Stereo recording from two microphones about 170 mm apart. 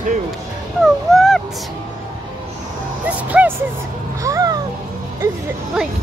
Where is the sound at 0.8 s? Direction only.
Centre (ahead or behind).